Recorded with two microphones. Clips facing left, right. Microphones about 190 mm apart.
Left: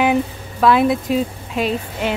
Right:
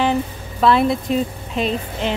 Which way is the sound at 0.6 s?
5° left (ahead or behind).